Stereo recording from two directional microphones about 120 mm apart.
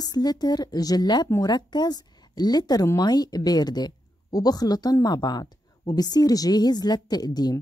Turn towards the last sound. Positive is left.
turn(degrees=35)  # may be behind; listen again after turning